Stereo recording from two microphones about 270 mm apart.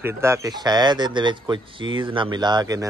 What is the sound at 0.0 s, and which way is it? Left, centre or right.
Speech, centre.